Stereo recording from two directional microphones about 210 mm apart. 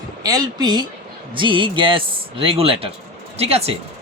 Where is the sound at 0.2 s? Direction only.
20° right (ahead or behind).